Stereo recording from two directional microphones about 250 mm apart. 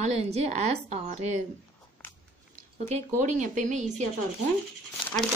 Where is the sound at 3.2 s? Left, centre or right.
Right.